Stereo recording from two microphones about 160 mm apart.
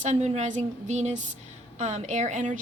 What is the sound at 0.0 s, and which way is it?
A woman's voice, 45° right (ahead or behind).